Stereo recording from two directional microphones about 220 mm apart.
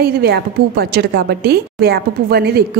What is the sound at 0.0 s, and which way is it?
A woman's voice, 45° right (ahead or behind).